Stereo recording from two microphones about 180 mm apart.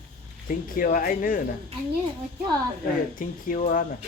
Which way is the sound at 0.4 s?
50° left (ahead or behind).